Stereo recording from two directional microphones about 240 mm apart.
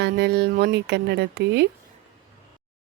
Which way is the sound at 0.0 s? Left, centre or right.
Right.